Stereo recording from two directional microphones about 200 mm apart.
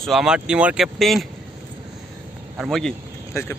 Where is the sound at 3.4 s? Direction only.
15° left (ahead or behind).